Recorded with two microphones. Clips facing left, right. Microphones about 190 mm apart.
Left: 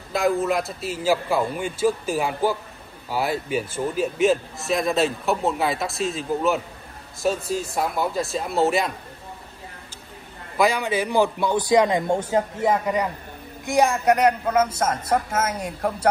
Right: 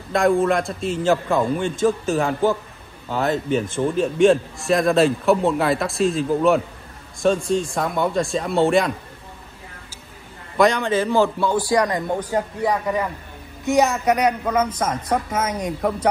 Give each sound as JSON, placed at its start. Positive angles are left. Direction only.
{"t": 0.1, "sound": "a man's voice", "side_deg": 5}
{"t": 10.6, "sound": "a man's voice", "side_deg": 5}